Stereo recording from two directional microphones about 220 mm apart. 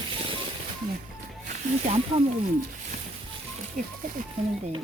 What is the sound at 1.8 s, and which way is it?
Speech, 30° right (ahead or behind).